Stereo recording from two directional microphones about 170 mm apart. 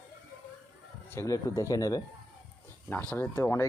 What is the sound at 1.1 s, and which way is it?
Speech, 15° left (ahead or behind).